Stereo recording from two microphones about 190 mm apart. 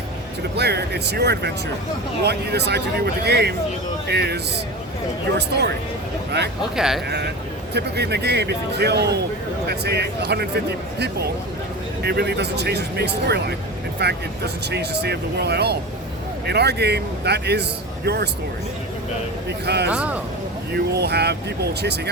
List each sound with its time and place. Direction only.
0.5 s a man's voice: 60° right (ahead or behind)
5.4 s a man's voice: 60° right (ahead or behind)
6.7 s speech: 5° right (ahead or behind)
7.7 s a man's voice: 60° right (ahead or behind)
19.6 s a man's voice: 60° right (ahead or behind)
19.9 s speech: 5° right (ahead or behind)
20.7 s a man's voice: 60° right (ahead or behind)